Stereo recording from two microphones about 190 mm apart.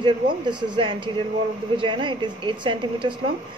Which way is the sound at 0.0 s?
25° right (ahead or behind).